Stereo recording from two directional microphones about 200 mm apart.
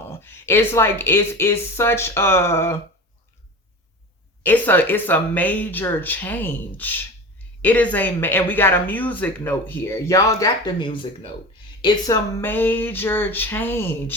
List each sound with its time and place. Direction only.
0.1 s speech: 10° left (ahead or behind)
4.4 s speech: 10° left (ahead or behind)